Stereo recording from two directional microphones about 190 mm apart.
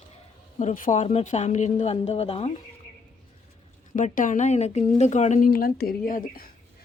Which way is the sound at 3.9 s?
45° left (ahead or behind).